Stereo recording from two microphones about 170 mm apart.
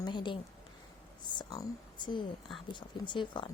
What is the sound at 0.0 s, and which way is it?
A woman's voice, 25° left (ahead or behind).